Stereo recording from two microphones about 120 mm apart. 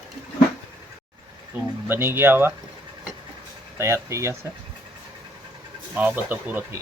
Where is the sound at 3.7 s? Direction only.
20° right (ahead or behind).